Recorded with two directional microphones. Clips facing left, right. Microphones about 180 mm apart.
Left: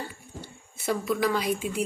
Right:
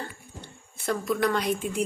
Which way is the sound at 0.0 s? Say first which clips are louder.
Left 1 dB; 5° left (ahead or behind).